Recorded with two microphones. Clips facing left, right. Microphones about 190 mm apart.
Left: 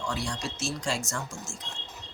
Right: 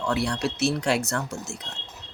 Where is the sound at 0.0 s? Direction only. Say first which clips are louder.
Right 7 dB; 65° right (ahead or behind).